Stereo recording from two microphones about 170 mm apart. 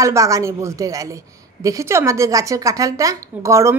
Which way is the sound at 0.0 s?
20° right (ahead or behind).